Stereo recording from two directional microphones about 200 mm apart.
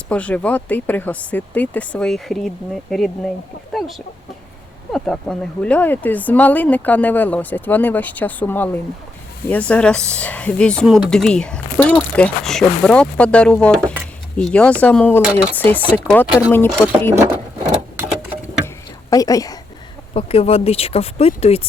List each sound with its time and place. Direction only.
0.1 s speech: 5° left (ahead or behind)
15.2 s speech: 5° right (ahead or behind)
15.5 s speech: 10° left (ahead or behind)
19.1 s speech: 15° left (ahead or behind)
20.1 s speech: 30° left (ahead or behind)